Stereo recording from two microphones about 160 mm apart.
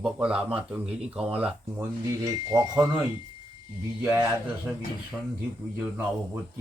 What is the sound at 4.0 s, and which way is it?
Speech, 15° right (ahead or behind).